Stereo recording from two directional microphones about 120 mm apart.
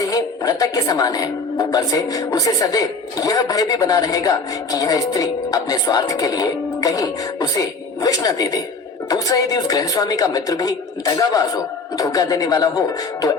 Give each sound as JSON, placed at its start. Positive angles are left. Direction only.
{"t": 0.1, "sound": "a woman's voice", "side_deg": 30}